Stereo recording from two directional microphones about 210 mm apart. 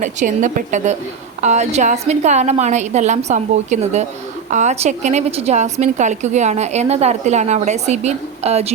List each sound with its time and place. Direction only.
0.0 s a woman's voice: 35° right (ahead or behind)